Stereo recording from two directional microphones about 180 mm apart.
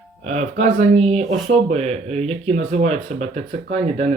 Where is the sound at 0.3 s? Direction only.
35° right (ahead or behind).